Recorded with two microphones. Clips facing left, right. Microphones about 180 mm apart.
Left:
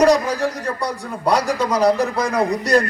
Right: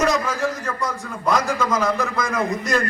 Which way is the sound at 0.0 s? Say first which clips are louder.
Left 5 dB; 35° left (ahead or behind).